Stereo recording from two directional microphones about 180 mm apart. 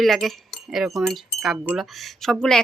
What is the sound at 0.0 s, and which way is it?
Speech, centre (ahead or behind).